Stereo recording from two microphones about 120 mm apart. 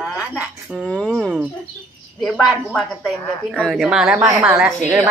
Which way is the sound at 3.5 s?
Centre (ahead or behind).